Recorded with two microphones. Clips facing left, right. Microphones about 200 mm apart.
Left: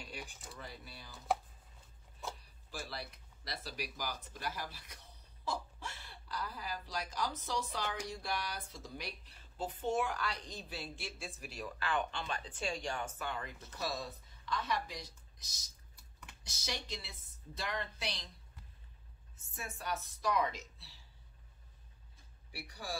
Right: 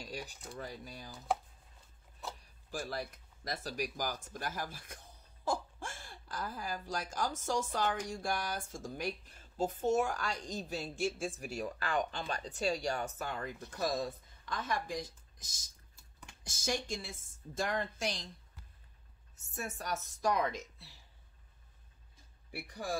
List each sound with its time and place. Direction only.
0.0 s a sound: 40° right (ahead or behind)
0.6 s speech: 45° right (ahead or behind)
2.7 s speech: 45° right (ahead or behind)
19.4 s speech: 45° right (ahead or behind)
22.5 s speech: 50° right (ahead or behind)